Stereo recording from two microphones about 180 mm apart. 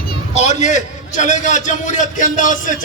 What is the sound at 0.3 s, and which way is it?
A man's voice, 40° left (ahead or behind).